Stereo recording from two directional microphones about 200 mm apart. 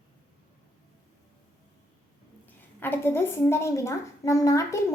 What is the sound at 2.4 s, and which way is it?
A woman's voice, 10° left (ahead or behind).